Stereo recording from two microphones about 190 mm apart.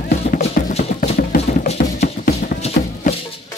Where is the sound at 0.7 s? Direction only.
35° left (ahead or behind).